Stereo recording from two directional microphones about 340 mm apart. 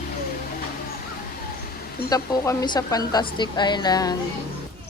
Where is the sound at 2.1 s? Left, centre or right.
Centre.